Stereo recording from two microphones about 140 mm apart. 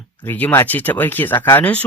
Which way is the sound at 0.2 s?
10° left (ahead or behind).